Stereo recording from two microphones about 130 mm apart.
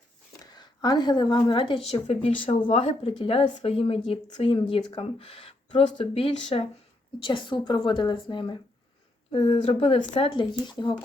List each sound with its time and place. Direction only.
0.5 s speech: 30° left (ahead or behind)
1.9 s speech: 55° left (ahead or behind); by 10.9 s 35° left (ahead or behind)